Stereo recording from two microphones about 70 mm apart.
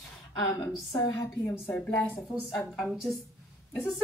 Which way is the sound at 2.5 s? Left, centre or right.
Centre.